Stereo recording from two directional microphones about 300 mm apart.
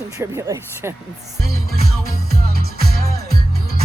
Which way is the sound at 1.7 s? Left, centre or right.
Right.